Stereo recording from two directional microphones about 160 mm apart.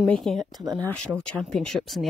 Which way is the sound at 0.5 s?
25° right (ahead or behind).